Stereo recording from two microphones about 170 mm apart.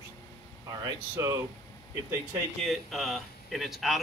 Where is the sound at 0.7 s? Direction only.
20° right (ahead or behind).